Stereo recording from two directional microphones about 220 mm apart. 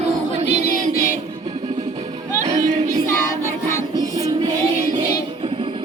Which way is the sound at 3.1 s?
10° left (ahead or behind).